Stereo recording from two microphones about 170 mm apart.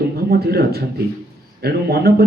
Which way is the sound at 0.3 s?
65° right (ahead or behind).